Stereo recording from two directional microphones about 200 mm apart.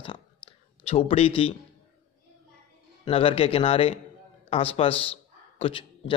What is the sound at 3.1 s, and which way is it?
A man's voice, 30° left (ahead or behind).